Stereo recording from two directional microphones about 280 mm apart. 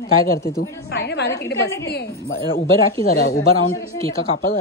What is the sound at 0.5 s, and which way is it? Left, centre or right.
A woman's voice, left.